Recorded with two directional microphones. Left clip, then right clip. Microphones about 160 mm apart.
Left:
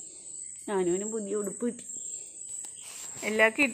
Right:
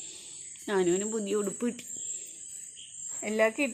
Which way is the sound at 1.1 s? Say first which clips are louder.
Right 2 dB; 20° right (ahead or behind).